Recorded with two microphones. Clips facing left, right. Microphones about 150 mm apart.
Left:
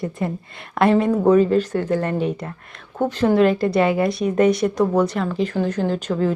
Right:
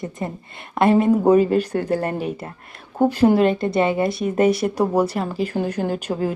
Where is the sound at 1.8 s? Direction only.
35° right (ahead or behind).